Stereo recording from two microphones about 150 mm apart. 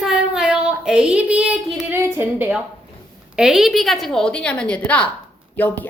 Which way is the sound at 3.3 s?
5° right (ahead or behind).